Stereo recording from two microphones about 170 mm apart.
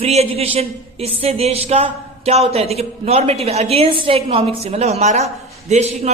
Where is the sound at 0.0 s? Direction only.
35° right (ahead or behind).